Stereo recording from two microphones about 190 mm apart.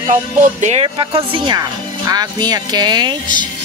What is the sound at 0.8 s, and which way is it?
Speech, 25° right (ahead or behind).